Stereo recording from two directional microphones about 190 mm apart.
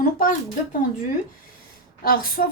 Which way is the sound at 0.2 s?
45° left (ahead or behind).